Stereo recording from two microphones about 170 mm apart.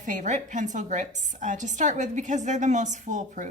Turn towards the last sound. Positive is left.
turn(degrees=-45)  # may be behind; listen again after turning